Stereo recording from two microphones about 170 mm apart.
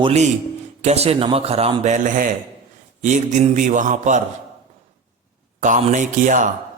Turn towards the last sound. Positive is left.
turn(degrees=-50)  # may be behind; listen again after turning